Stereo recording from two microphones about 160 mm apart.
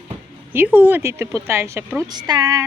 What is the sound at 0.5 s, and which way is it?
Speech, 10° right (ahead or behind).